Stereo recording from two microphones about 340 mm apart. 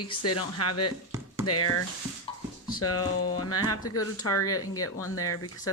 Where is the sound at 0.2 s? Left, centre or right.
Left.